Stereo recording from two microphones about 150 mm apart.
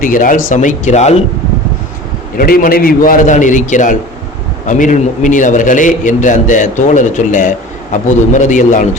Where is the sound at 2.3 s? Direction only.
75° left (ahead or behind).